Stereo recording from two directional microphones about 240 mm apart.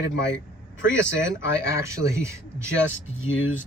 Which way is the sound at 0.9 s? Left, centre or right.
Centre.